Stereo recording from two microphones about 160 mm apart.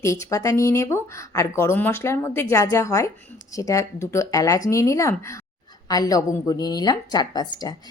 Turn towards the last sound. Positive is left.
turn(degrees=25)  # may be behind; listen again after turning